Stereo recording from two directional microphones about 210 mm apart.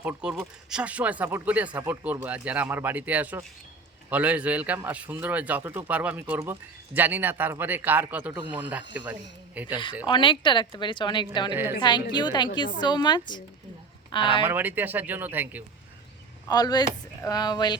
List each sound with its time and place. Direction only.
0.0 s a man's voice: 5° right (ahead or behind)
10.1 s speech: 20° left (ahead or behind)
14.4 s a man's voice: 10° right (ahead or behind)
16.5 s speech: 20° left (ahead or behind)